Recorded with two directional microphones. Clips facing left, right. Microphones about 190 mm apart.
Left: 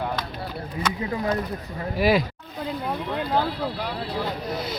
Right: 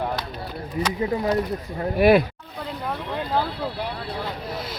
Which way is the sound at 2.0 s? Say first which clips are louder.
Right 5 dB; 60° right (ahead or behind).